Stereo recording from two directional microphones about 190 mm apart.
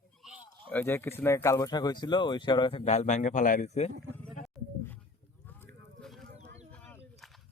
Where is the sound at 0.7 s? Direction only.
10° left (ahead or behind); by 3.9 s 40° left (ahead or behind).